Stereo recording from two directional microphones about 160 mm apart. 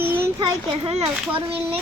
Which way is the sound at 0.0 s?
10° right (ahead or behind).